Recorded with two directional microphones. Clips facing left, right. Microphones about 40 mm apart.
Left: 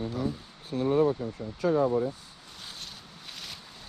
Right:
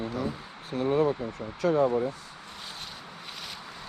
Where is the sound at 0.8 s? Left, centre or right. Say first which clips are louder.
Even; right.